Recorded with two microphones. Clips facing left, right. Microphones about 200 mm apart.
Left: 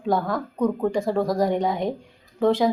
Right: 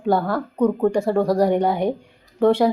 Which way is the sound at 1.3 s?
70° right (ahead or behind).